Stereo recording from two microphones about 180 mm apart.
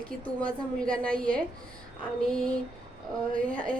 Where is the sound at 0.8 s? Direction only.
5° left (ahead or behind).